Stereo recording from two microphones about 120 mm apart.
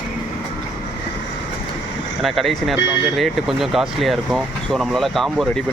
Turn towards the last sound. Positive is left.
turn(degrees=0)  # may be behind; listen again after turning